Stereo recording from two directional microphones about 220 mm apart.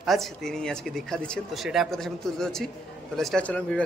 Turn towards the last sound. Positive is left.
turn(degrees=5)  # may be behind; listen again after turning